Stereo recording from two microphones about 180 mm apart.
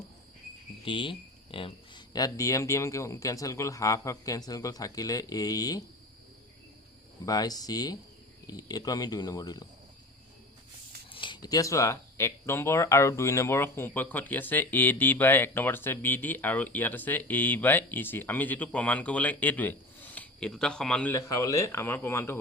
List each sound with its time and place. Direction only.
0.9 s speech: 25° left (ahead or behind)
7.3 s speech: 20° left (ahead or behind)
11.1 s speech: 25° left (ahead or behind); by 21.1 s 5° left (ahead or behind)
21.1 s speech: 15° left (ahead or behind)